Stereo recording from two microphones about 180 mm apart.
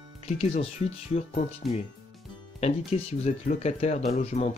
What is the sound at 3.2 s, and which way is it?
Speech, 40° left (ahead or behind).